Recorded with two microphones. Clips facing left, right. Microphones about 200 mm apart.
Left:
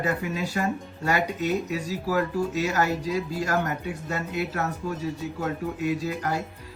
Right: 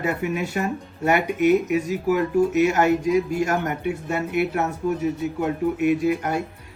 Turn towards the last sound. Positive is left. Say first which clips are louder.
# right 6 dB
turn(degrees=-25)  # may be behind; listen again after turning